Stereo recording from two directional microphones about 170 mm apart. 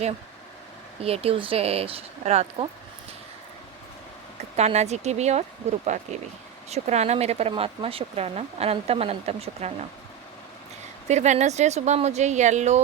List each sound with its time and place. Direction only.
1.0 s speech: 35° right (ahead or behind)
4.5 s speech: 40° right (ahead or behind)
11.1 s speech: 40° right (ahead or behind)